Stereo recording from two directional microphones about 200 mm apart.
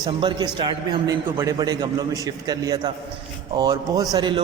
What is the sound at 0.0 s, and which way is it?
A man's voice, 20° right (ahead or behind).